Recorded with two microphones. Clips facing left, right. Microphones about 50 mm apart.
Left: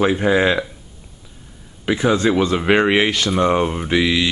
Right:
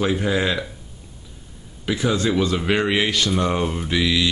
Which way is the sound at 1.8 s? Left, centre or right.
Left.